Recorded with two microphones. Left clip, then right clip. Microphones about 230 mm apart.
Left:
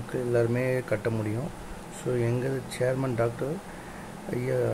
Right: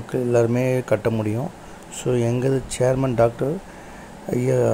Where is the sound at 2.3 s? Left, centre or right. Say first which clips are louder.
Right 8 dB; right.